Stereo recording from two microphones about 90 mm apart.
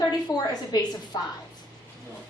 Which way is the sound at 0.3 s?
50° left (ahead or behind).